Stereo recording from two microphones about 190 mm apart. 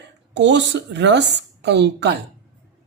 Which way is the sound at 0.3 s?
65° right (ahead or behind).